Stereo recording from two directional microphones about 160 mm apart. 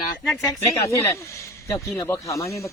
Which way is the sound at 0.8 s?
15° left (ahead or behind).